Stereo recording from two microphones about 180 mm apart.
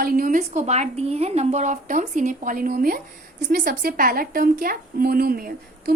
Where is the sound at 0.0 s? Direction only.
50° right (ahead or behind).